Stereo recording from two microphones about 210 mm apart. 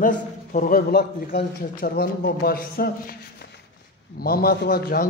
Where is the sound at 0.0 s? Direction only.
40° left (ahead or behind).